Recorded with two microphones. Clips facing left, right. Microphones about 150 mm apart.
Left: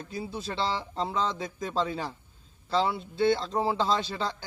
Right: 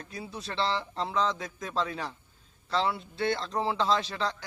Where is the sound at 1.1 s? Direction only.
25° left (ahead or behind).